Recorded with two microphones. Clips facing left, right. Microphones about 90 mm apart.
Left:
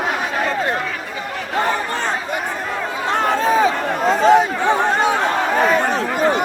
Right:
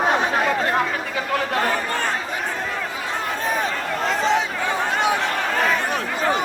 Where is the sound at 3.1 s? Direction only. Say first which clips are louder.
Left 10 dB; 70° left (ahead or behind).